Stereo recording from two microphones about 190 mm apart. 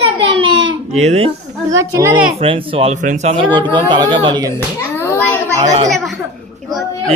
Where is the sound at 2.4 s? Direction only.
30° right (ahead or behind).